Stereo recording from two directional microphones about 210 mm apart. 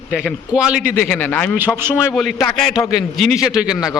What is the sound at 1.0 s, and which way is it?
A man's voice, 10° left (ahead or behind).